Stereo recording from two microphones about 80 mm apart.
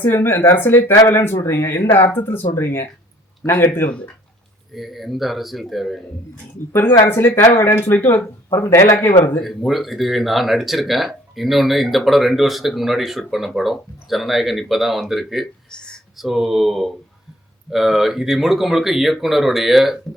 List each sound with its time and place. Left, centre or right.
0.0 s a man's voice: left
4.7 s speech: centre
7.1 s a man's voice: left
9.4 s speech: centre
15.7 s a sound: centre
16.1 s speech: centre